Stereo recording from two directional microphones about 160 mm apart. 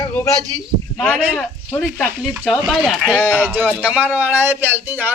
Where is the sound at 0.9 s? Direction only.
5° left (ahead or behind).